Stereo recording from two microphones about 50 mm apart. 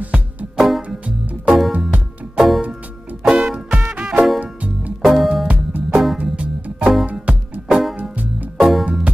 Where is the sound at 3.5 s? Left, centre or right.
Right.